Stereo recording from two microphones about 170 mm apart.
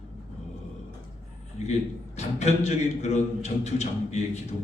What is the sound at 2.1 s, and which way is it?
A man's voice, 40° left (ahead or behind).